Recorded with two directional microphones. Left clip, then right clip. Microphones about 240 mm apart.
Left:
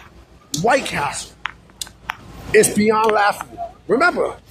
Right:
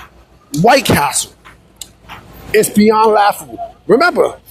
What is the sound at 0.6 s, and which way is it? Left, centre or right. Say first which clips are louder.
Speech: right 8 dB; right.